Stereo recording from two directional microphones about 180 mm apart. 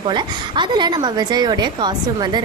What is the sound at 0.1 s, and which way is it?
A woman's voice, 25° right (ahead or behind).